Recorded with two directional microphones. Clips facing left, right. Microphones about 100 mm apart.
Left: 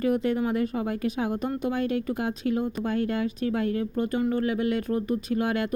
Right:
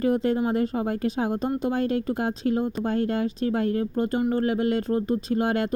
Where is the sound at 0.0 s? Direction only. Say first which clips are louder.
Right 2 dB; 30° right (ahead or behind).